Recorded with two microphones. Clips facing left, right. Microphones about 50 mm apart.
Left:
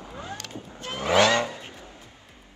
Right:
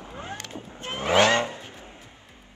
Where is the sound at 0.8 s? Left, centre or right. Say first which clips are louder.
Even; right.